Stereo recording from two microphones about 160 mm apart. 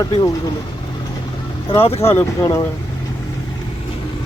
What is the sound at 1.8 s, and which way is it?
Speech, 40° left (ahead or behind).